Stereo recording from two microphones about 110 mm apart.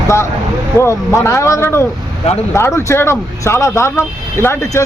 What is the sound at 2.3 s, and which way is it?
Speech, 75° left (ahead or behind).